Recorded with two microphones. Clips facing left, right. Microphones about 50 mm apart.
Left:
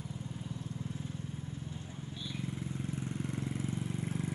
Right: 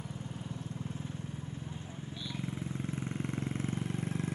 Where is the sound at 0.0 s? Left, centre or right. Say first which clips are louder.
Right 1 dB; right.